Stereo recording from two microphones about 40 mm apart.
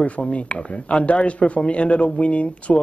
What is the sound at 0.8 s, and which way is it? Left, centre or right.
Speech, left.